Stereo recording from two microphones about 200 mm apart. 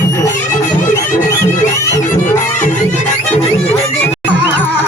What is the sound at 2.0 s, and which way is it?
Music, 40° left (ahead or behind).